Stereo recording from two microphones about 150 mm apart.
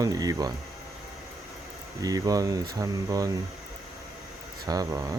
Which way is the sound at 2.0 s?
25° right (ahead or behind).